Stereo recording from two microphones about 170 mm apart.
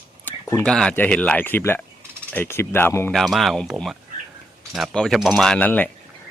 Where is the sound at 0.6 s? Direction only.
5° left (ahead or behind).